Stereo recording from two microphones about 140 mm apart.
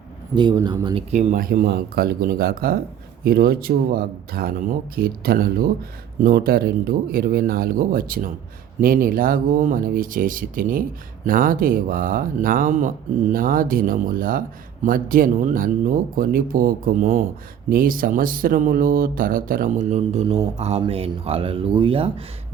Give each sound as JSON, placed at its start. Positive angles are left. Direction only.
{"t": 0.3, "sound": "a man's voice", "side_deg": -30}
{"t": 1.1, "sound": "speech", "side_deg": -60}
{"t": 13.3, "sound": "speech", "side_deg": -85}